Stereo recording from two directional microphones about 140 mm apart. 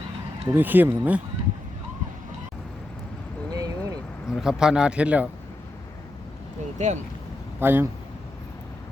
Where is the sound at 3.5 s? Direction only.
25° right (ahead or behind).